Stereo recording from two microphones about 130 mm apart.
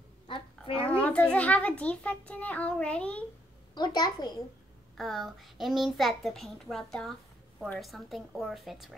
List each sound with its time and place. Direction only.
0.3 s a child's voice: 40° left (ahead or behind)
0.8 s a child's voice: 10° left (ahead or behind)
3.7 s a child's voice: 30° left (ahead or behind)
4.9 s a child's voice: centre (ahead or behind)